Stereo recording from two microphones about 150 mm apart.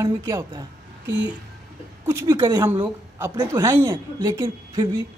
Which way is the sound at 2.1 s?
15° right (ahead or behind).